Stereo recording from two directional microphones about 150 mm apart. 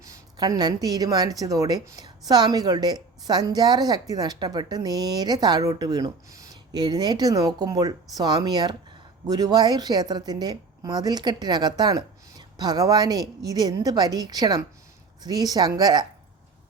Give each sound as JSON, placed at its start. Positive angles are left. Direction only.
{"t": 0.0, "sound": "speech", "side_deg": -25}